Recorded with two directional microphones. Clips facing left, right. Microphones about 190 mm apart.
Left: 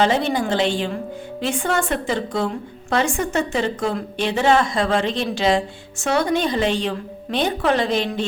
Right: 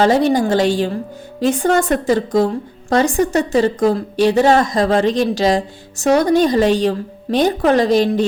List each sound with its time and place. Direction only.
0.0 s a woman's voice: 40° right (ahead or behind)